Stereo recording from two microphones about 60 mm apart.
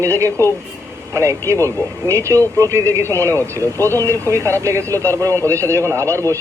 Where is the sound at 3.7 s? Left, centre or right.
Left.